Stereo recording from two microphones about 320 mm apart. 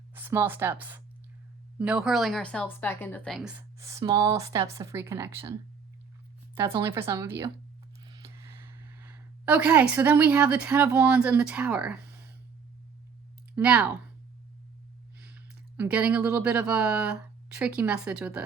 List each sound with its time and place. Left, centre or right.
0.1 s speech: centre
6.6 s a woman's voice: centre
13.6 s speech: centre
15.8 s speech: centre